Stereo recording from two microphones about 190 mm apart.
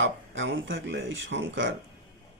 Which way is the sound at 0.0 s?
80° right.